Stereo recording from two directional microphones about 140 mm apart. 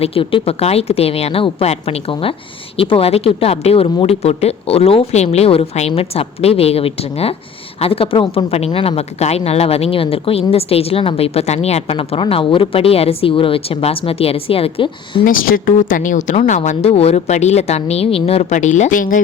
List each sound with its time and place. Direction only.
0.0 s speech: 40° left (ahead or behind)
8.5 s speech: 45° left (ahead or behind)
15.2 s speech: 90° left; by 19.2 s 75° left (ahead or behind)